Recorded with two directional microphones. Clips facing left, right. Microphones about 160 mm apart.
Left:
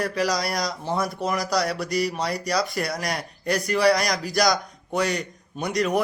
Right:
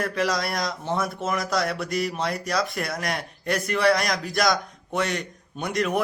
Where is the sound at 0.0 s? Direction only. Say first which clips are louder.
Left 1 dB; centre (ahead or behind).